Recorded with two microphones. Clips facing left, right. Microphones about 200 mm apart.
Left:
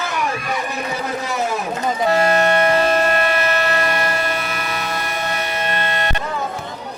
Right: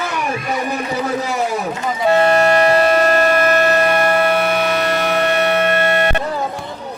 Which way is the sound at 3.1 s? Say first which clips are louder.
Right 5 dB; 40° right (ahead or behind).